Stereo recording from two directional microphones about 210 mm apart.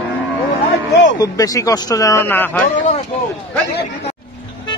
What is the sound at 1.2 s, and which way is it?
Speech, 15° left (ahead or behind).